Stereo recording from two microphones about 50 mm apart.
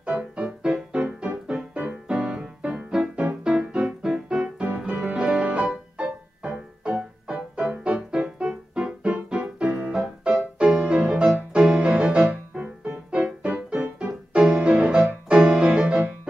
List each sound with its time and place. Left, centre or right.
0.0 s music: right
1.0 s music: right
1.5 s keyboard: right
4.9 s music: centre